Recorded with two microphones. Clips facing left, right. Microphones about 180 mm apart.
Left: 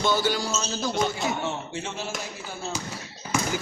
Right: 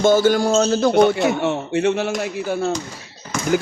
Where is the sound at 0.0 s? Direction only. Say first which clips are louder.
Right 10 dB; 50° right (ahead or behind).